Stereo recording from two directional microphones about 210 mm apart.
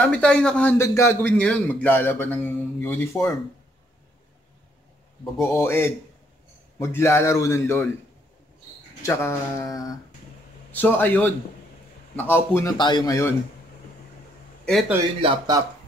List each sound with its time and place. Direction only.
0.0 s a man's voice: 5° left (ahead or behind)
5.4 s a man's voice: 10° left (ahead or behind)
9.0 s a man's voice: 10° left (ahead or behind)
14.6 s a man's voice: centre (ahead or behind)
15.1 s speech: 25° right (ahead or behind)